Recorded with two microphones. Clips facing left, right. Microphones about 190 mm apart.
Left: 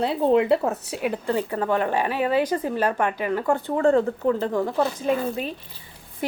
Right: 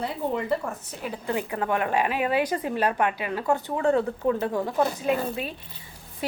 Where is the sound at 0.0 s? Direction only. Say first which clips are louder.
Left 9 dB; 80° left.